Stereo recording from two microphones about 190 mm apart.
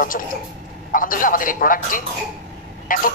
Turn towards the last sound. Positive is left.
turn(degrees=45)  # may be behind; listen again after turning